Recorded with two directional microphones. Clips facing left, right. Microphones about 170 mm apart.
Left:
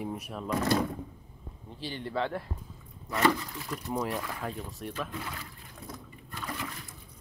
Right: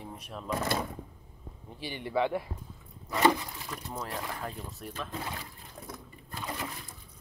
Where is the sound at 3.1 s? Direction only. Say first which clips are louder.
Right 1 dB; 20° right (ahead or behind).